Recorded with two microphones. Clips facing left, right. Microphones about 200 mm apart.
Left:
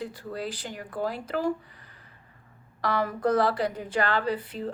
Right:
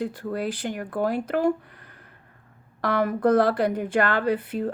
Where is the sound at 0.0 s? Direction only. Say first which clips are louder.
Right 6 dB; 55° right (ahead or behind).